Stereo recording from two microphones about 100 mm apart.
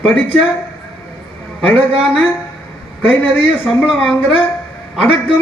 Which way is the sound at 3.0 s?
15° left (ahead or behind).